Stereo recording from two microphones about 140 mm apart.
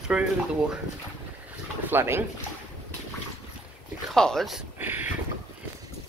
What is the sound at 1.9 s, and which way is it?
Speech, 15° right (ahead or behind).